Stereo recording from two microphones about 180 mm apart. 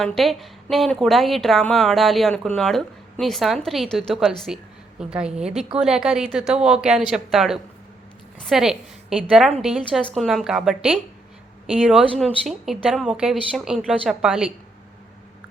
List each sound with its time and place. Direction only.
0.0 s a woman's voice: centre (ahead or behind)